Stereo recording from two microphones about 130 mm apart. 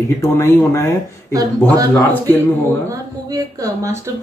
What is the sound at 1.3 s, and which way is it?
Speech, 25° right (ahead or behind).